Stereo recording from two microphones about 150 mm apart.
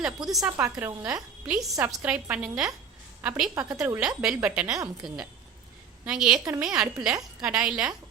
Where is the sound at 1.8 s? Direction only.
20° right (ahead or behind).